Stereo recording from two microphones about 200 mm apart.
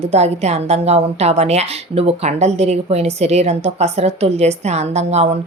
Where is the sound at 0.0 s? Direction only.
30° right (ahead or behind).